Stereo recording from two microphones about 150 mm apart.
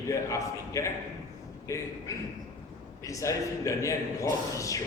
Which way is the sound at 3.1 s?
20° left (ahead or behind).